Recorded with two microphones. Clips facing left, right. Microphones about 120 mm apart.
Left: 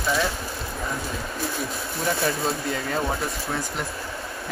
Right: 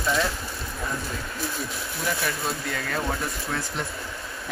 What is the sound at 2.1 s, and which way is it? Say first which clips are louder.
Speech: left 4 dB; 25° left (ahead or behind).